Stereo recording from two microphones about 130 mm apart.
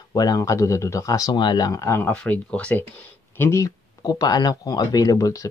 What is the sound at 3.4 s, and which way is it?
Speech, 25° left (ahead or behind).